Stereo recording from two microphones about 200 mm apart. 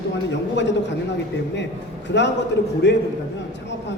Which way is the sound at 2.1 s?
60° left (ahead or behind).